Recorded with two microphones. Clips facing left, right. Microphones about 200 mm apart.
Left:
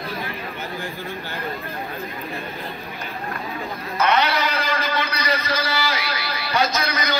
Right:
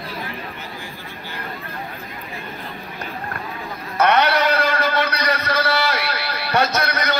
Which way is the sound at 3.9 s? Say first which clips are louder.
Right 3 dB; 65° right (ahead or behind).